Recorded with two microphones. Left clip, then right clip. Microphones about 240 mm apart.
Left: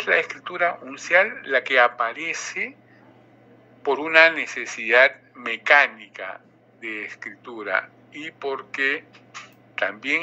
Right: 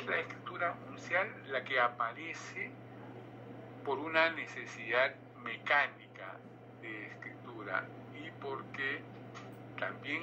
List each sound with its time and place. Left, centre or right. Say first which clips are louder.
0.0 s speech: left 15 dB; left
3.8 s speech: left 15 dB; left